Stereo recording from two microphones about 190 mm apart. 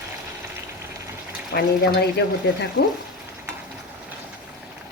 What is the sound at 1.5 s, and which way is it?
Speech, 55° left (ahead or behind).